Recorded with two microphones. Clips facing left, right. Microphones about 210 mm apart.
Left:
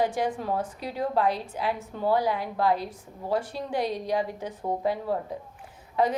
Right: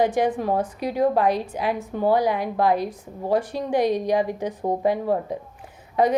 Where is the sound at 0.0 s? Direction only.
20° right (ahead or behind).